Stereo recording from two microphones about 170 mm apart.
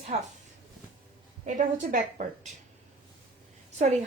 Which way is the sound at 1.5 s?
50° right (ahead or behind).